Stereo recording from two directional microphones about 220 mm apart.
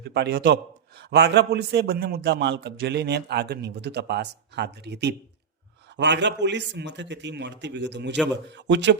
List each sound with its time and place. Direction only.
0.0 s a man's voice: 50° right (ahead or behind)